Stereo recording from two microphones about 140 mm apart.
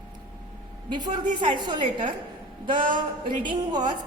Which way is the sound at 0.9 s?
30° right (ahead or behind).